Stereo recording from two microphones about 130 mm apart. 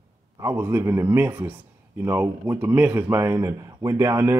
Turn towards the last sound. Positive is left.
turn(degrees=-20)  # may be behind; listen again after turning